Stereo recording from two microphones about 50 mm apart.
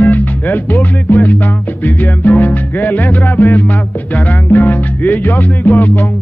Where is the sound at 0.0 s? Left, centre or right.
Left.